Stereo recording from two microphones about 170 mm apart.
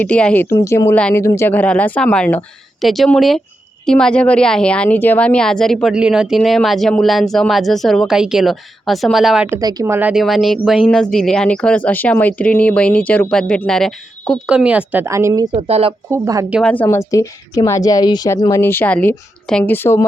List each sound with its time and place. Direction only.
0.0 s a woman's voice: 5° left (ahead or behind)
9.5 s speech: 20° right (ahead or behind)
15.5 s speech: 35° right (ahead or behind)
16.0 s speech: 15° right (ahead or behind)
16.6 s a woman's voice: 10° left (ahead or behind)